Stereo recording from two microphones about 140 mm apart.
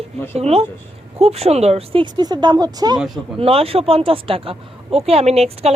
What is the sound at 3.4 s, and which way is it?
A woman's voice, 45° right (ahead or behind).